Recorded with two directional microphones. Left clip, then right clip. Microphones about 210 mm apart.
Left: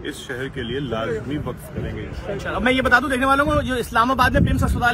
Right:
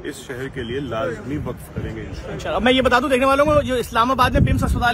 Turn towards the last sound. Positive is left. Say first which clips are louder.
# even
turn(degrees=-15)  # may be behind; listen again after turning